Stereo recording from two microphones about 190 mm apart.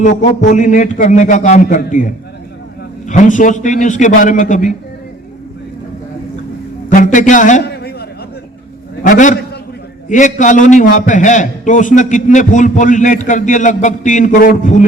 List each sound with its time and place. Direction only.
0.0 s a man's voice: 40° left (ahead or behind)
6.9 s a man's voice: 45° left (ahead or behind)
7.6 s a sound: 60° left (ahead or behind)
9.0 s a man's voice: 45° left (ahead or behind)